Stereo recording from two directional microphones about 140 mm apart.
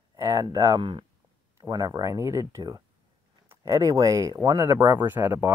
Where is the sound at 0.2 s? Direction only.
25° right (ahead or behind).